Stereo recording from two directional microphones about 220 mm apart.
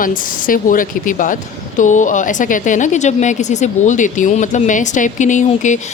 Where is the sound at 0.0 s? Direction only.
40° left (ahead or behind).